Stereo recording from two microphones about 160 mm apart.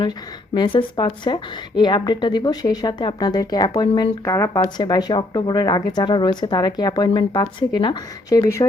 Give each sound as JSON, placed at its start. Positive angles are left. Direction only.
{"t": 0.5, "sound": "a woman's voice", "side_deg": 30}